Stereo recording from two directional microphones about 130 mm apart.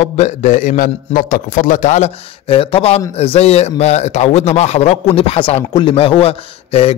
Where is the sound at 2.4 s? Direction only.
45° left (ahead or behind).